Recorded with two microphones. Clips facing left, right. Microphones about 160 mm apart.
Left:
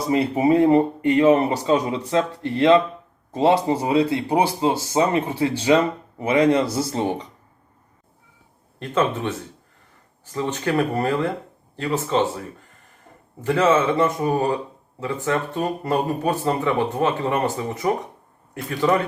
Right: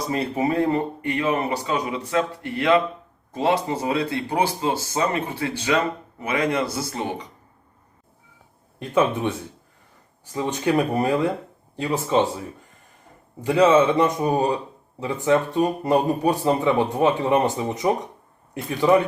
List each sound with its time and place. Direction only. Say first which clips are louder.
0.1 s speech: left 6 dB; 20° left (ahead or behind)
8.8 s speech: right 1 dB; 10° right (ahead or behind)
10.3 s speech: right 1 dB; 15° right (ahead or behind)
13.4 s speech: right 2 dB; 15° right (ahead or behind)